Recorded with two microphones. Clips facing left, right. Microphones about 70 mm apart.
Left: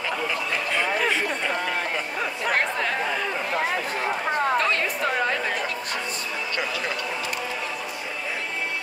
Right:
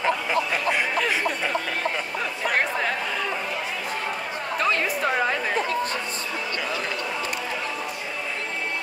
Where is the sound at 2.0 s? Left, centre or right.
Centre.